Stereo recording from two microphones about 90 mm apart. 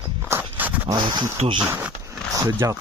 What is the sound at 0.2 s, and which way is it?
Walk, 25° right (ahead or behind).